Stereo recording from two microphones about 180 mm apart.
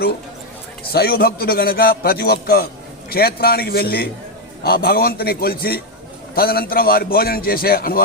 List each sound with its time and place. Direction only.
0.9 s a man's voice: 60° left (ahead or behind)